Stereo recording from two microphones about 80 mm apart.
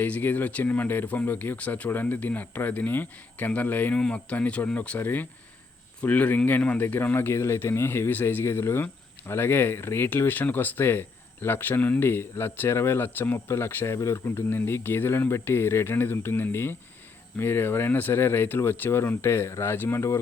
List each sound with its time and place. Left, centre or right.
0.0 s speech: left